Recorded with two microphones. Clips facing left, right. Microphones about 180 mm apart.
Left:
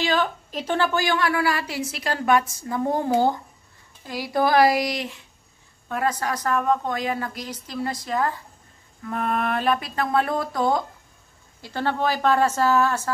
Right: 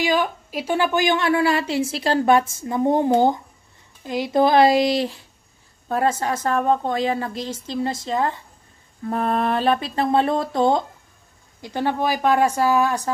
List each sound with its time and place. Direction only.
0.0 s a woman's voice: 10° right (ahead or behind)
11.6 s a woman's voice: 15° right (ahead or behind)